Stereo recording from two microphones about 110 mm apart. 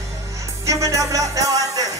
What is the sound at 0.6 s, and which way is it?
Music, 30° right (ahead or behind).